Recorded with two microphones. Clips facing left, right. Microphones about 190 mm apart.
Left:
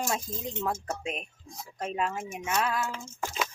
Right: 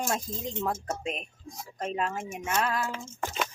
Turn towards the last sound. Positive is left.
turn(degrees=0)  # may be behind; listen again after turning